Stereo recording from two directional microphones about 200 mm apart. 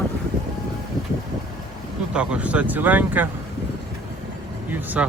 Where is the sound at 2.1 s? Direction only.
5° right (ahead or behind).